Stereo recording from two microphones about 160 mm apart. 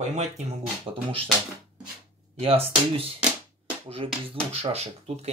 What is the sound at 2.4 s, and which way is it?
Speech, 35° right (ahead or behind).